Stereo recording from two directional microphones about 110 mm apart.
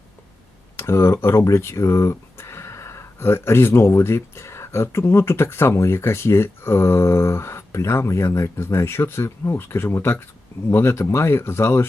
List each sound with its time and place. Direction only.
0.8 s speech: 25° left (ahead or behind)